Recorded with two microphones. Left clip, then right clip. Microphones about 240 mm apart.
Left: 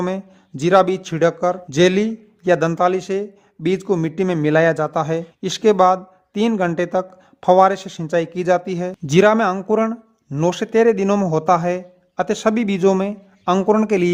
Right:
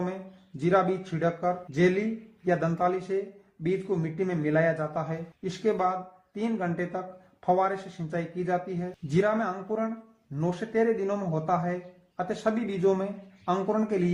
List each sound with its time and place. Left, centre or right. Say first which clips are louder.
0.0 s speech: left 10 dB; left